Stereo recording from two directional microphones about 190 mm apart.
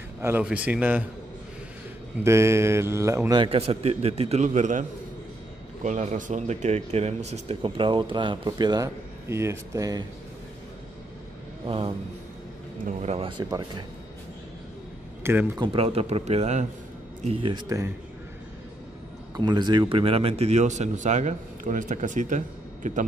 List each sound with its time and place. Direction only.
0.2 s a man's voice: 10° right (ahead or behind)
2.2 s a man's voice: 15° right (ahead or behind)
11.6 s a man's voice: 30° right (ahead or behind)
13.4 s a man's voice: 20° right (ahead or behind)
15.2 s a man's voice: 10° right (ahead or behind)
15.6 s a man's voice: 30° right (ahead or behind)
19.3 s a man's voice: 20° right (ahead or behind); by 23.0 s 40° right (ahead or behind)